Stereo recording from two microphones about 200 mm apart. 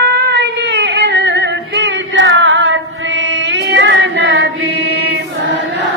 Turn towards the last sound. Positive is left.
turn(degrees=-60)  # may be behind; listen again after turning